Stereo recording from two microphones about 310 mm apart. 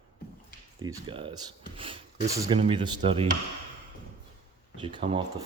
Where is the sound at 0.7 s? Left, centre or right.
Centre.